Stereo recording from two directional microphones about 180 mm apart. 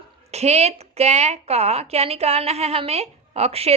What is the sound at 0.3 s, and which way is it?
A woman's voice, 35° right (ahead or behind).